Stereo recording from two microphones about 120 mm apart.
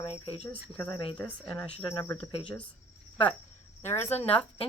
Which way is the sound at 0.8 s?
30° left (ahead or behind).